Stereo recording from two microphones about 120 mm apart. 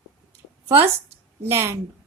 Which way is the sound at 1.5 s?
20° right (ahead or behind).